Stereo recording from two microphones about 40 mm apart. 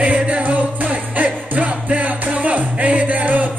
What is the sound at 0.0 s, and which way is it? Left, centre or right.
Music, right.